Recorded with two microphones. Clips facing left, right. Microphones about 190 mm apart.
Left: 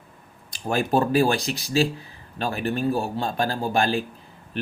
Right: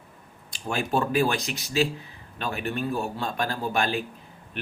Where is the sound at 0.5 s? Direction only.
40° left (ahead or behind).